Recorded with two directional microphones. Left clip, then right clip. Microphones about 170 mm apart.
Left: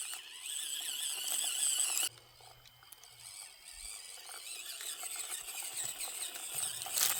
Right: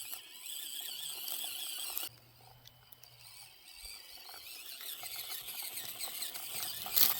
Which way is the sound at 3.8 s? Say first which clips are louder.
Even; 30° left (ahead or behind).